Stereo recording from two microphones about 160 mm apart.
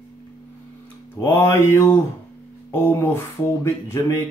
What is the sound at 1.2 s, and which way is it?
Speech, 15° left (ahead or behind).